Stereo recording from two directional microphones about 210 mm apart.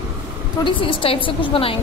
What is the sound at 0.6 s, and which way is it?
A woman's voice, 25° left (ahead or behind).